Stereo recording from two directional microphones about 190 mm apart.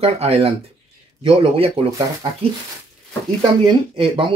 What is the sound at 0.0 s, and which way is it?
Speech, 30° right (ahead or behind).